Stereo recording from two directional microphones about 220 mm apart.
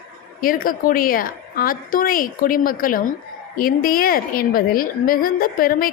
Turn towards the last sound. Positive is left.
turn(degrees=40)  # may be behind; listen again after turning